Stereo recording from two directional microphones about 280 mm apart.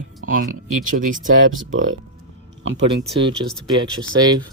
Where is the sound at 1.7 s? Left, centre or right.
Right.